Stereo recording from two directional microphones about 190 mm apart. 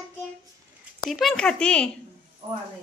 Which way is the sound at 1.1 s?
Centre (ahead or behind).